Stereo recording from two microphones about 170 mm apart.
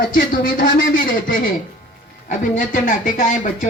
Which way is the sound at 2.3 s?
50° left (ahead or behind).